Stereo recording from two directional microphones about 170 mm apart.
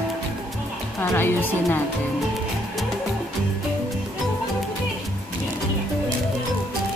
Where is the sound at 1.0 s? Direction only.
10° left (ahead or behind).